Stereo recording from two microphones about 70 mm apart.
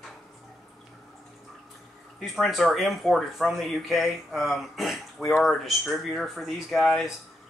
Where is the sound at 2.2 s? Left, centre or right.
Centre.